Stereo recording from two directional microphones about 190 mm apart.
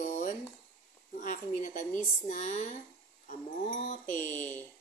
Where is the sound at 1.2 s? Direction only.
40° left (ahead or behind).